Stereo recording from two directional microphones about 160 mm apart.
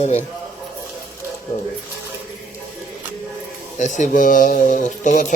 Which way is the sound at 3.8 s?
50° left (ahead or behind).